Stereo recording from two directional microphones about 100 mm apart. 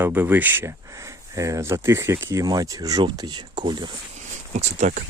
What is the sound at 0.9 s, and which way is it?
Speech, 30° right (ahead or behind).